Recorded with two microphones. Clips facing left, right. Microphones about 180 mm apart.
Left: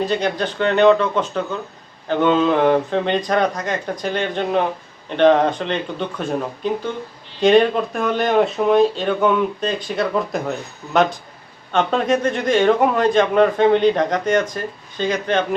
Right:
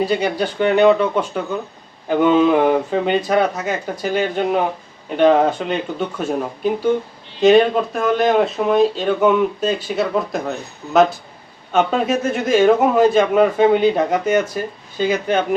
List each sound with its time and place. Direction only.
0.0 s a man's voice: 10° right (ahead or behind)
11.7 s a man's voice: 5° right (ahead or behind)